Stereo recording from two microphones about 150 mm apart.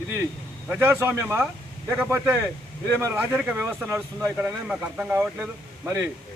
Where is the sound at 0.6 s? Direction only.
15° right (ahead or behind).